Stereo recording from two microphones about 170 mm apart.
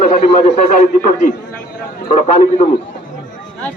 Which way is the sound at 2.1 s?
40° left (ahead or behind).